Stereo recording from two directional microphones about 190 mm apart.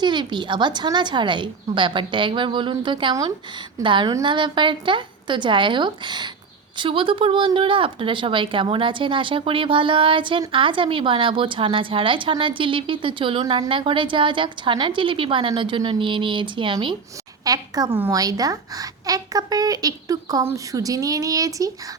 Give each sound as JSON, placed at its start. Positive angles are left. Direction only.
{"t": 0.0, "sound": "a woman's voice", "side_deg": -25}